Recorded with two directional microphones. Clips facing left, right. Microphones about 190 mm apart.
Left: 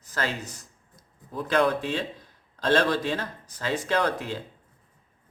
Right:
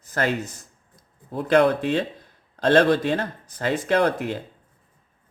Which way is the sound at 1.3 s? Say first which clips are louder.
Right 5 dB; 65° right (ahead or behind).